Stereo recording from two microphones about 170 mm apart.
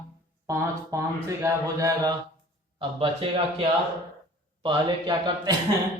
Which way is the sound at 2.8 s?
30° right (ahead or behind).